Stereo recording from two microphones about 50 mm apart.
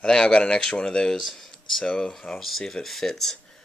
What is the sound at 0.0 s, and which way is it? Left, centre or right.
Speech, centre.